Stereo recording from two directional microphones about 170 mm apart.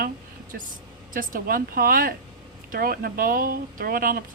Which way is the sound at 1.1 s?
55° right (ahead or behind).